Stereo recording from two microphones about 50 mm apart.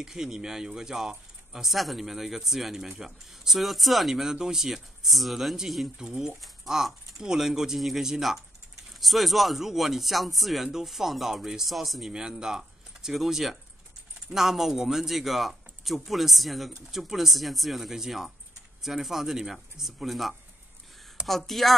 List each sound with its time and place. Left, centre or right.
0.0 s speech: centre
5.9 s speech: centre
12.1 s speech: centre